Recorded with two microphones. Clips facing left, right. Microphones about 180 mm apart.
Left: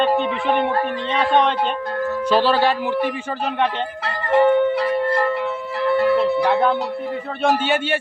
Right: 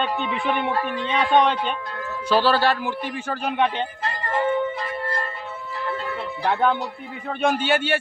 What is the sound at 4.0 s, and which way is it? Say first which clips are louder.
Music: left 10 dB; 70° left (ahead or behind).